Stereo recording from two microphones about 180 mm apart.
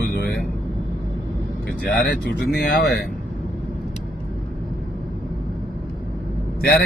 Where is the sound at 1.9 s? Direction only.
70° left (ahead or behind).